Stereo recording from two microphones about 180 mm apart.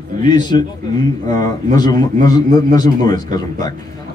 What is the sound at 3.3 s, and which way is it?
Speech, 20° left (ahead or behind).